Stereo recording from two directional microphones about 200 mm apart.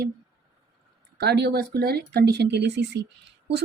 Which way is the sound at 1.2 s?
55° right (ahead or behind).